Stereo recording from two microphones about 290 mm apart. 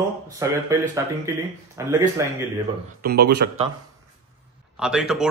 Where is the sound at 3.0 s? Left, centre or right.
Right.